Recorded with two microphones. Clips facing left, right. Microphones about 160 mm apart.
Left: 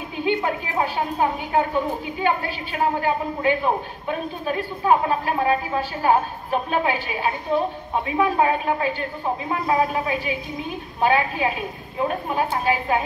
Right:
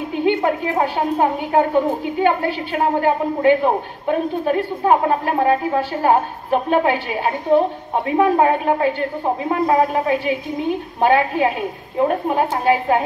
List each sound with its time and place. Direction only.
0.1 s a woman's voice: 60° right (ahead or behind)